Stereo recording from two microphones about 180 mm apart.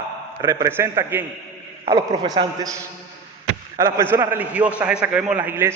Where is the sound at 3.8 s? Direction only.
15° right (ahead or behind).